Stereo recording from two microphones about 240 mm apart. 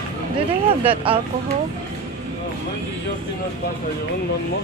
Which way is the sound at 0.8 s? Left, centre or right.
Right.